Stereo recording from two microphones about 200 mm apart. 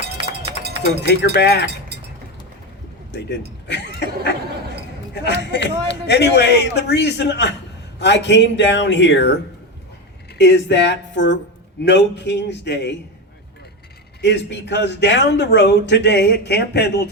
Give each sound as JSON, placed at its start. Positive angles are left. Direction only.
{"t": 0.0, "sound": "run", "side_deg": -55}
{"t": 1.0, "sound": "a man's voice", "side_deg": 60}
{"t": 3.1, "sound": "a man's voice", "side_deg": 55}
{"t": 14.2, "sound": "a man's voice", "side_deg": 60}